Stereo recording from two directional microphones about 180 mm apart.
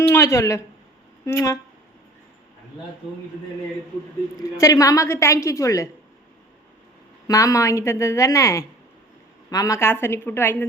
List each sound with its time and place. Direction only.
0.1 s a woman's voice: 15° left (ahead or behind)
4.5 s a woman's voice: 20° left (ahead or behind)
7.3 s a woman's voice: 20° left (ahead or behind)